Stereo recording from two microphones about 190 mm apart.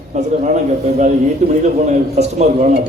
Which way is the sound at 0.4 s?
40° right (ahead or behind).